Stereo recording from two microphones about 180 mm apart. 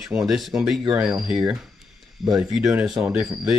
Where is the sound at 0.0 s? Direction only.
5° right (ahead or behind).